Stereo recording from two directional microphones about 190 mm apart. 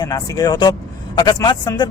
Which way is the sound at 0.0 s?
20° left (ahead or behind).